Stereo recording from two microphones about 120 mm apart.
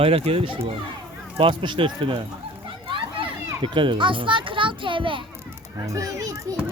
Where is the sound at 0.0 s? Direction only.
55° right (ahead or behind).